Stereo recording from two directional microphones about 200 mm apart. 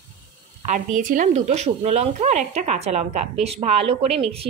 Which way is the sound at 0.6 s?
40° right (ahead or behind).